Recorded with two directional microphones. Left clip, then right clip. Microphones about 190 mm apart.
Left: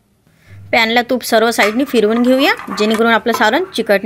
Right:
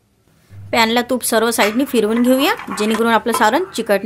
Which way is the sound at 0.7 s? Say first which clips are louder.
Left 3 dB; centre (ahead or behind).